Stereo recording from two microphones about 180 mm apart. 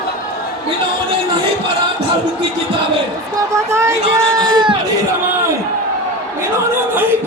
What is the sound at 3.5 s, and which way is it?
Speech, 15° right (ahead or behind).